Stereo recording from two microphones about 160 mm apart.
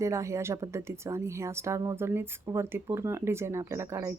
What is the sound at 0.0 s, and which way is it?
A woman's voice, 20° right (ahead or behind).